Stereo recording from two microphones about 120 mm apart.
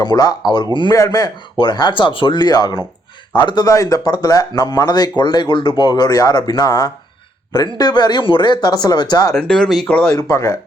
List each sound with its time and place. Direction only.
0.0 s speech: 35° left (ahead or behind)
9.3 s speech: 5° left (ahead or behind)
10.2 s speech: 25° left (ahead or behind)